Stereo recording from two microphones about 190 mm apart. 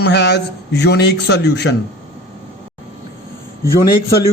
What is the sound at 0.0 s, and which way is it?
A man's voice, 60° left (ahead or behind).